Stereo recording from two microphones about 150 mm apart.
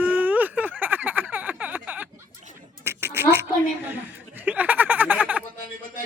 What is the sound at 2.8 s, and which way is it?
Duck, 15° right (ahead or behind).